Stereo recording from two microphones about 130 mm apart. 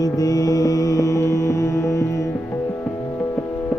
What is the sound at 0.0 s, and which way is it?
Music, 30° left (ahead or behind).